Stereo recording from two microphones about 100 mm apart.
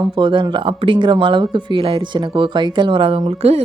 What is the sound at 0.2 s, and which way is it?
Speech, 55° right (ahead or behind).